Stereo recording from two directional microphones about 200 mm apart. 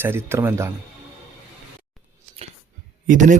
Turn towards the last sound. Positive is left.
turn(degrees=-40)  # may be behind; listen again after turning